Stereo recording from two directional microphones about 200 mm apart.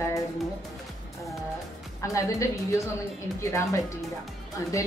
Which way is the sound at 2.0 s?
15° left (ahead or behind).